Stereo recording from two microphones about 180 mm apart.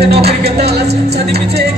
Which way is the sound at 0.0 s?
65° right (ahead or behind).